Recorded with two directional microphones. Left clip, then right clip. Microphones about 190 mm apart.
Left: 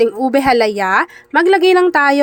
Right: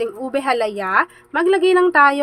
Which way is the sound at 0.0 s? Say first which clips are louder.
Left 8 dB; 35° left (ahead or behind).